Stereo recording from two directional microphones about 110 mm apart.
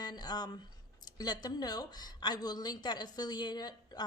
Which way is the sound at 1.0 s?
40° left (ahead or behind).